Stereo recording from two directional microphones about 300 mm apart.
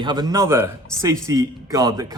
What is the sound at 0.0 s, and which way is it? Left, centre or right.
Speech, centre.